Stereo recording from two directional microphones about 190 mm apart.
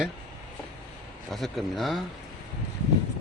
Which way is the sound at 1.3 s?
Centre (ahead or behind).